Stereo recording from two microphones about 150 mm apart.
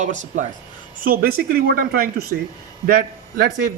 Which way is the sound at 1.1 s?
85° right.